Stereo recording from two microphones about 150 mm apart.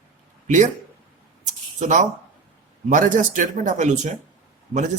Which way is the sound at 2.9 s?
60° right (ahead or behind).